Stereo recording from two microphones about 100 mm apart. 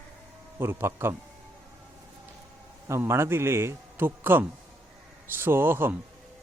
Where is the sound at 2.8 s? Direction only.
25° right (ahead or behind).